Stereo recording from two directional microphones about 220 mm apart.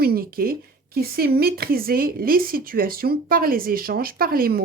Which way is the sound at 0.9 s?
45° right (ahead or behind).